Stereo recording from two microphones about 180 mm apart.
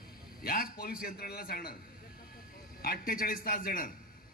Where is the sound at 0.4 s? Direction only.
55° left (ahead or behind).